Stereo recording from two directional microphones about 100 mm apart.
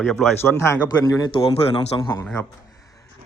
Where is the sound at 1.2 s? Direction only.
55° left (ahead or behind).